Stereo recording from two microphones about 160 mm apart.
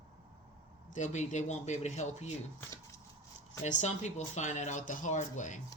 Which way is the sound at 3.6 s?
45° left (ahead or behind).